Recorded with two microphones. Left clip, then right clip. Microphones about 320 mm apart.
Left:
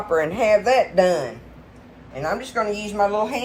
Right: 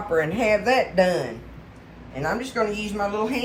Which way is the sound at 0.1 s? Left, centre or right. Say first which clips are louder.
Left 3 dB; centre.